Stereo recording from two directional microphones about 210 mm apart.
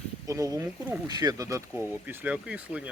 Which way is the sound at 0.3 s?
15° right (ahead or behind).